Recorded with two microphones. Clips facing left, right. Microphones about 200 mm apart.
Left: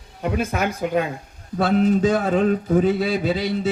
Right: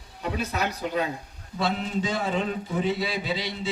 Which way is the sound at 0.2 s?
50° left (ahead or behind).